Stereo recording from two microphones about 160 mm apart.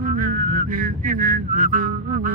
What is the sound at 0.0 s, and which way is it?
Music, 55° right (ahead or behind).